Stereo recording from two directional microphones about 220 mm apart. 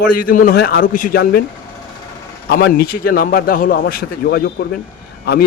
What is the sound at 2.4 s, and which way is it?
A man's voice, 45° left (ahead or behind).